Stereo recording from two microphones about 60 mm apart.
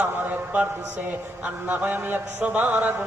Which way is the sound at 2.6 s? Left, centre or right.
Right.